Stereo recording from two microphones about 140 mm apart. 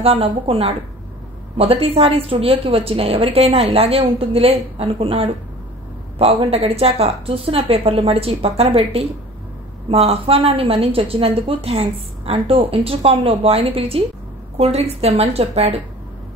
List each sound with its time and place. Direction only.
0.0 s a woman's voice: 45° right (ahead or behind)